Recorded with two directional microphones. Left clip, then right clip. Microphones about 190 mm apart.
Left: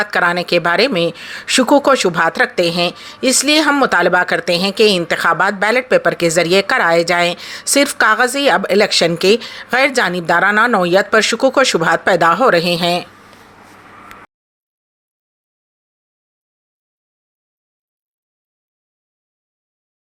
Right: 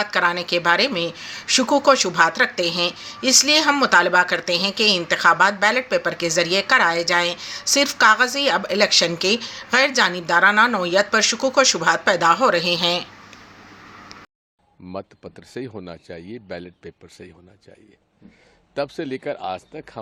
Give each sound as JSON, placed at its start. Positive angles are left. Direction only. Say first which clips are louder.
{"t": 0.0, "sound": "speech", "louder": "left 5 dB", "side_deg": 45}